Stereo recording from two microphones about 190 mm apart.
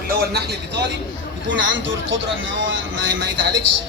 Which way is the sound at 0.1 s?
55° right (ahead or behind).